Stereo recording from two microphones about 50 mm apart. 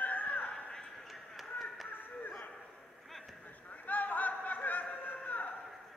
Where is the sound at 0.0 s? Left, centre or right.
Left.